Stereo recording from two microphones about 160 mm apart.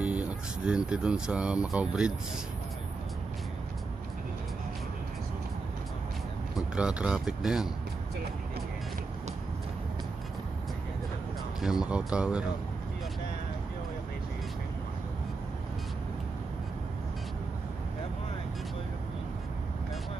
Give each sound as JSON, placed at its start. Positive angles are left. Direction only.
{"t": 0.0, "sound": "speech", "side_deg": -10}
{"t": 6.5, "sound": "speech", "side_deg": -5}
{"t": 11.6, "sound": "speech", "side_deg": -5}